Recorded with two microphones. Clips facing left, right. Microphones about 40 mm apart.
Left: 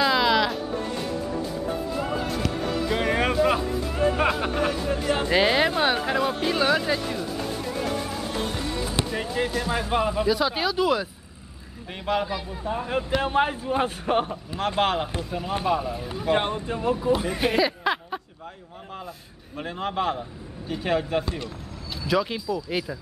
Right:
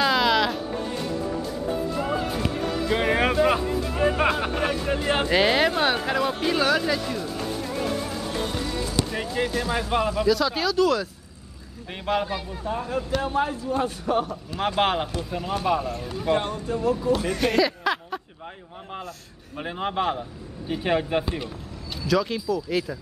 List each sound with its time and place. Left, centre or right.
0.0 s music: centre
2.0 s music: centre
4.2 s speech: centre
4.8 s speech: right
5.3 s speech: centre
9.1 s speech: centre
10.0 s speech: centre
12.1 s speech: centre
13.2 s speech: left
14.8 s a man's voice: centre
16.3 s speech: left
16.9 s speech: centre
19.6 s a man's voice: centre
22.0 s speech: centre